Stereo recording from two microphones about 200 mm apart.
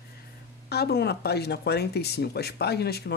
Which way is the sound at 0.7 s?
55° left (ahead or behind).